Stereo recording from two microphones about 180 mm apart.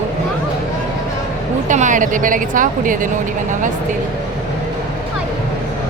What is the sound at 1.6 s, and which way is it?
A woman's voice, 45° right (ahead or behind).